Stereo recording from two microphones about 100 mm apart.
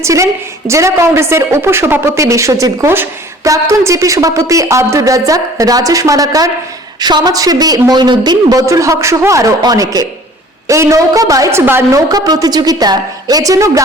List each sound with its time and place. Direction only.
0.0 s a woman's voice: 30° right (ahead or behind)
11.6 s a woman's voice: 20° right (ahead or behind)
11.9 s speech: 35° right (ahead or behind)